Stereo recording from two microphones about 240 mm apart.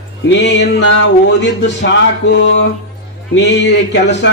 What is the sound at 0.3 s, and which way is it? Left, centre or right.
A man's voice, left.